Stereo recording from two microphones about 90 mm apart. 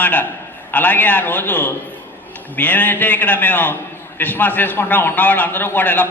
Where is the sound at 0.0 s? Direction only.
20° left (ahead or behind).